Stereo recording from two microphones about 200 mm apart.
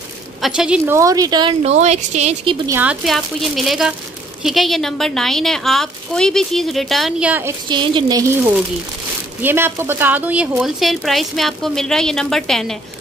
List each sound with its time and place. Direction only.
0.4 s speech: 5° right (ahead or behind); by 2.5 s 35° right (ahead or behind)
2.6 s a woman's voice: 10° right (ahead or behind)
7.7 s a woman's voice: 25° right (ahead or behind); by 12.7 s centre (ahead or behind)